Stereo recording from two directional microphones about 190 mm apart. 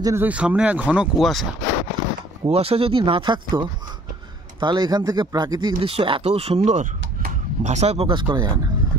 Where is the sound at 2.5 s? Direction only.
30° right (ahead or behind).